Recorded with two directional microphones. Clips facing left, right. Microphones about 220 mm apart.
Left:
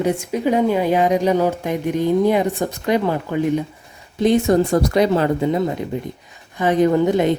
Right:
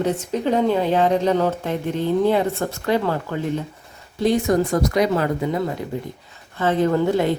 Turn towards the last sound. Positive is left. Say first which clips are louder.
# left 3 dB
turn(degrees=20)  # may be behind; listen again after turning